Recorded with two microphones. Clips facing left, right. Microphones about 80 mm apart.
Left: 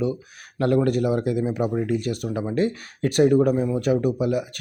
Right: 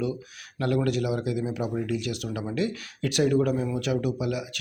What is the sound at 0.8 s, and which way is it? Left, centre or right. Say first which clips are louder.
Speech: left 5 dB; left.